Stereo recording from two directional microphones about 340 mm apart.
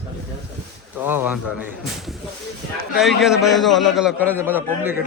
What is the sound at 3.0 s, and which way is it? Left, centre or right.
A man's voice, centre.